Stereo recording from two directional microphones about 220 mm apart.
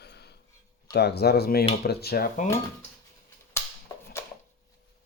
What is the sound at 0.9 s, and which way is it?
Speech, 50° left (ahead or behind).